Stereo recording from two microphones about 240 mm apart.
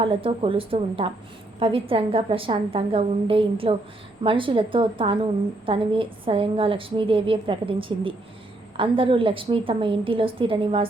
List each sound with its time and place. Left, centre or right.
0.0 s a woman's voice: right